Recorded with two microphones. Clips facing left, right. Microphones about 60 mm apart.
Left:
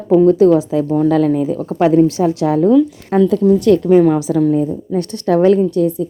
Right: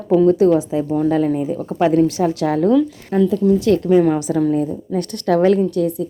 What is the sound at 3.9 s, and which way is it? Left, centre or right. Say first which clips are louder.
Speech: left 3 dB; left.